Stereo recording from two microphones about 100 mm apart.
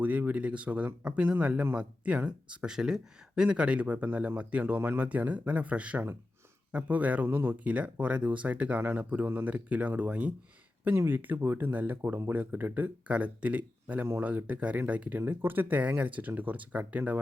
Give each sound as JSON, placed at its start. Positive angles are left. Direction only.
{"t": 0.0, "sound": "speech", "side_deg": -15}